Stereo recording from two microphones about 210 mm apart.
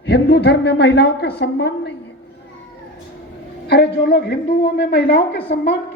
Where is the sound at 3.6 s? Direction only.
50° left (ahead or behind).